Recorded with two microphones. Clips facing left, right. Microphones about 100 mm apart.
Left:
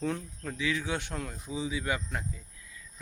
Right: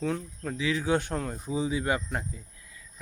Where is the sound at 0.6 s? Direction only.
30° right (ahead or behind).